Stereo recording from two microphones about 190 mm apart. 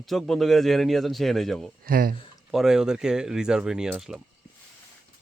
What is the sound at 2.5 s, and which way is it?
Speech, centre (ahead or behind).